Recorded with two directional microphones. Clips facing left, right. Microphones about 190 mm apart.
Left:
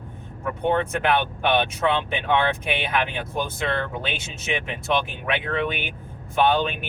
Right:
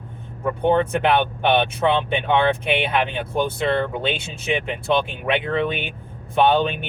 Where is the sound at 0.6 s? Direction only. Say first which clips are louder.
Right 4 dB; 30° right (ahead or behind).